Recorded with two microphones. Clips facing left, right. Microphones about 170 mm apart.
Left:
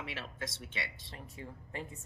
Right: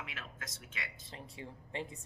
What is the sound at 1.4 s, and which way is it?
Speech, 25° right (ahead or behind).